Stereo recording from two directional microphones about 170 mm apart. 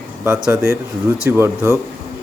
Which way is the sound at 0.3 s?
5° right (ahead or behind).